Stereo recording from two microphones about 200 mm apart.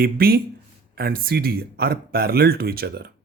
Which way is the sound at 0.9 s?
50° right (ahead or behind).